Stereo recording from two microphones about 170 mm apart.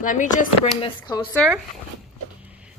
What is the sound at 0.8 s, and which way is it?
Speech, 25° left (ahead or behind).